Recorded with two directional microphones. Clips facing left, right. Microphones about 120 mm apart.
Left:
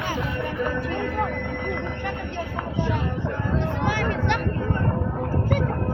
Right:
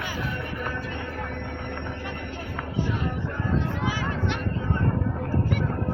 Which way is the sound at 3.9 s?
65° left (ahead or behind).